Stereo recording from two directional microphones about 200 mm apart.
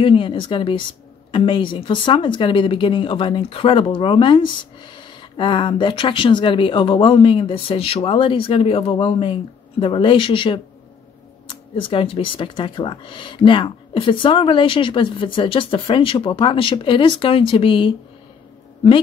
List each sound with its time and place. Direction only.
0.0 s speech: 25° left (ahead or behind)